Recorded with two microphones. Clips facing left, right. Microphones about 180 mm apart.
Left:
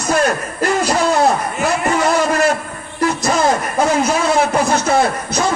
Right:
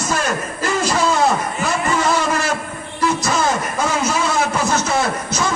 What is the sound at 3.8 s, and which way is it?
A man's voice, 60° left (ahead or behind).